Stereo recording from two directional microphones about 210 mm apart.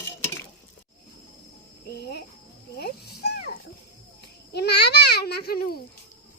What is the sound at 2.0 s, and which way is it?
Cricket, 50° left (ahead or behind).